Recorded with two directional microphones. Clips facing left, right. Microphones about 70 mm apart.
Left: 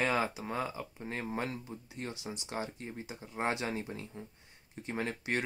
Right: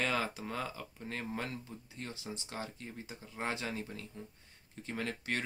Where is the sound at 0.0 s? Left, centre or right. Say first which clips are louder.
Left 3 dB; left.